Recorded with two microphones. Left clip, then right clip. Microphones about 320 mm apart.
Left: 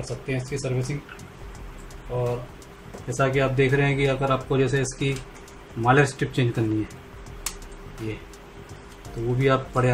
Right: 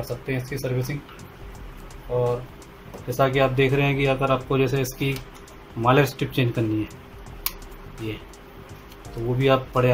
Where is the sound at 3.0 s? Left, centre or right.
Centre.